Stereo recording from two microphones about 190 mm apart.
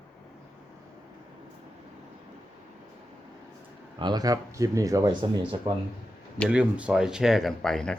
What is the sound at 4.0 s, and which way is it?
Speech, 20° right (ahead or behind).